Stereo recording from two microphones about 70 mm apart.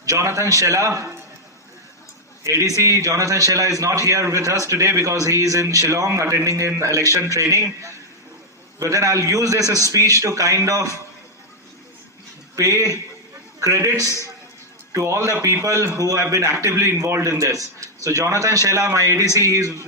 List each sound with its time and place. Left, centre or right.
0.0 s a man's voice: right
2.4 s a man's voice: right
12.5 s a man's voice: right
16.3 s a man's voice: right
17.3 s a man's voice: right